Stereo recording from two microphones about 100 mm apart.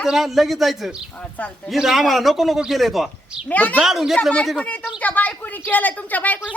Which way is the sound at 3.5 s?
15° left (ahead or behind).